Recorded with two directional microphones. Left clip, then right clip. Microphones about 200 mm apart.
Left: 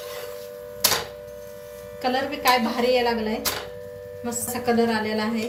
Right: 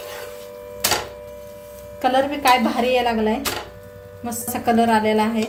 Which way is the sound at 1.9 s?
50° right (ahead or behind).